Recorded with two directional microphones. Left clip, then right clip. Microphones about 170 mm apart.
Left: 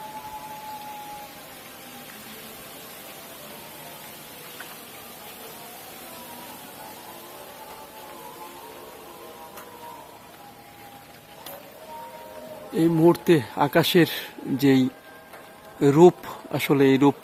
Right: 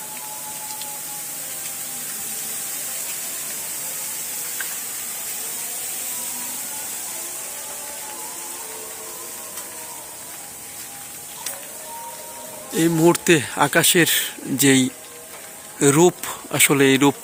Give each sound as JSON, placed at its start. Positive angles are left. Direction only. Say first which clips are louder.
{"t": 12.7, "sound": "speech", "louder": "right 2 dB", "side_deg": 5}